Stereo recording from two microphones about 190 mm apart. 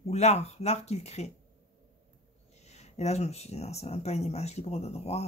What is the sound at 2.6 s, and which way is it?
Speech, 35° left (ahead or behind).